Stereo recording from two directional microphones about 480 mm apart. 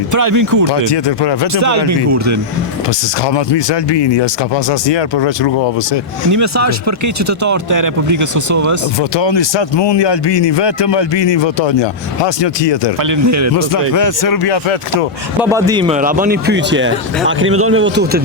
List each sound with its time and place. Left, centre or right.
0.1 s speech: right
0.9 s speech: left
1.5 s speech: right
3.2 s speech: left
6.3 s speech: right
9.0 s speech: left
13.0 s speech: right
13.9 s speech: left
15.4 s a man's voice: centre; by 18.2 s right